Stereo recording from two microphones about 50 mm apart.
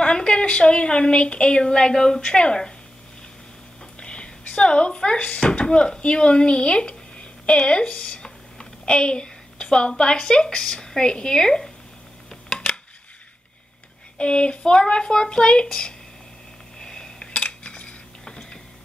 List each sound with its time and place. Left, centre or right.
0.0 s a woman's voice: centre
4.0 s speech: left
12.3 s a sound: centre
14.1 s speech: left
16.7 s dishes: centre